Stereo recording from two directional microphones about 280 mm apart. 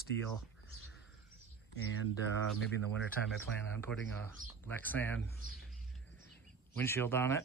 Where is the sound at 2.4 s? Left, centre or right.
Centre.